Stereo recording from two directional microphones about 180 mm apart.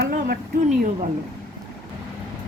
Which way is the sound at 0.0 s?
55° right (ahead or behind).